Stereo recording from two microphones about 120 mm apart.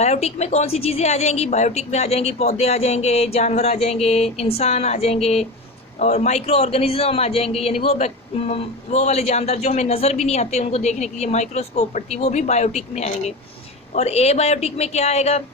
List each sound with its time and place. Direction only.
0.0 s a man's voice: 65° left (ahead or behind)